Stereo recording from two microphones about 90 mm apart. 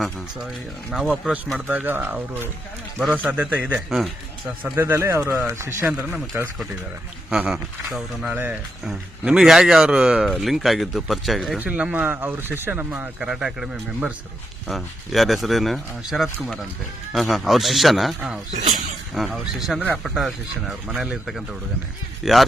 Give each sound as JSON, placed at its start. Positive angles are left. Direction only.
{"t": 1.5, "sound": "speech", "side_deg": -15}
{"t": 4.4, "sound": "speech", "side_deg": -25}
{"t": 5.8, "sound": "speech", "side_deg": -15}
{"t": 7.3, "sound": "speech", "side_deg": -5}
{"t": 8.3, "sound": "speech", "side_deg": -20}
{"t": 8.8, "sound": "speech", "side_deg": -5}
{"t": 11.6, "sound": "speech", "side_deg": -15}
{"t": 12.9, "sound": "speech", "side_deg": -10}